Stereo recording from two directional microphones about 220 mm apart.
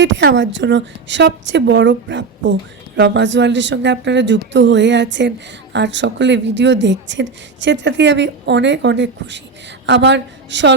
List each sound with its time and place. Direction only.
0.0 s a woman's voice: 55° right (ahead or behind)